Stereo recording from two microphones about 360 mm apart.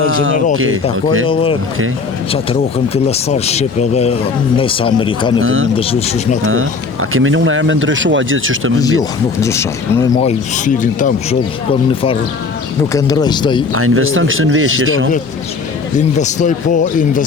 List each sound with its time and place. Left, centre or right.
0.0 s speech: right
1.3 s speech: centre
5.4 s speech: right
5.7 s speech: centre
6.4 s speech: right
8.8 s speech: centre
12.9 s speech: centre
13.7 s speech: right
16.0 s speech: centre